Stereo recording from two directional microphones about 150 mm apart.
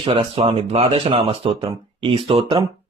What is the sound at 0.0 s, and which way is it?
Speech, 35° right (ahead or behind).